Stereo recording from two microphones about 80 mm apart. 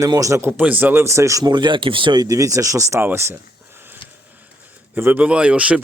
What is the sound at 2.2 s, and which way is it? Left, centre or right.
Speech, right.